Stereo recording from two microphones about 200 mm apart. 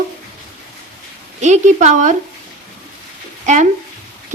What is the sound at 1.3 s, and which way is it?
Speech, 35° right (ahead or behind).